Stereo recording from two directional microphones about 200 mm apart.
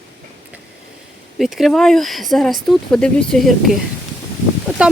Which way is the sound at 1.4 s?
Centre (ahead or behind).